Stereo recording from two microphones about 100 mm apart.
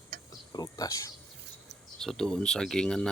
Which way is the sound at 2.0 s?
5° left (ahead or behind).